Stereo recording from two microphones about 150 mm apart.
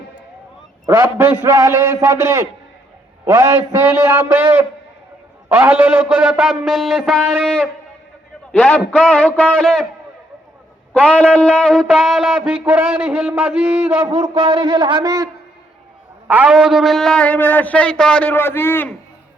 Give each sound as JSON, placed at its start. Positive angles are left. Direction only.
{"t": 0.9, "sound": "a man's voice", "side_deg": -15}
{"t": 5.5, "sound": "speech", "side_deg": -10}
{"t": 9.0, "sound": "a man's voice", "side_deg": 10}
{"t": 10.9, "sound": "speech", "side_deg": 10}
{"t": 14.4, "sound": "speech", "side_deg": -30}
{"t": 16.2, "sound": "a man's voice", "side_deg": -10}